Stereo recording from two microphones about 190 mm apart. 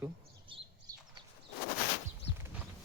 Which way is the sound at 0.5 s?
30° right (ahead or behind).